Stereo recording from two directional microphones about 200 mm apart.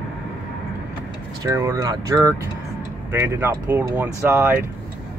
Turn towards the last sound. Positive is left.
turn(degrees=-10)  # may be behind; listen again after turning